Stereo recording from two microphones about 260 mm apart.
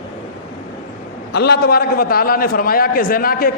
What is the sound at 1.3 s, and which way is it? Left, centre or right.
A man's voice, left.